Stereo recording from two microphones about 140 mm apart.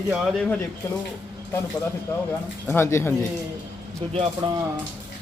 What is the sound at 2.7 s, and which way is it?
Speech, 20° left (ahead or behind).